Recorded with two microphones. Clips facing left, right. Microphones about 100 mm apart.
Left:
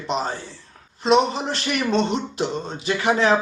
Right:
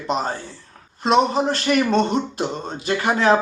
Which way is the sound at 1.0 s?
45° right (ahead or behind).